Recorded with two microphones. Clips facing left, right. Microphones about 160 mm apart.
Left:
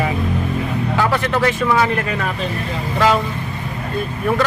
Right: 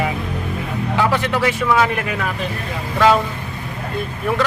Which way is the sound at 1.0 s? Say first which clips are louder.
Even; 15° right (ahead or behind).